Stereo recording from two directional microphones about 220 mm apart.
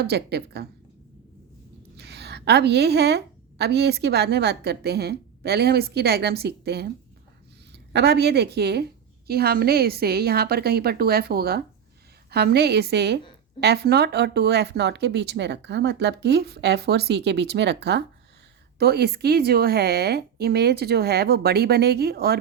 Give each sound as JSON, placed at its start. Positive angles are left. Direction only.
{"t": 0.0, "sound": "speech", "side_deg": -50}
{"t": 2.0, "sound": "a woman's voice", "side_deg": -50}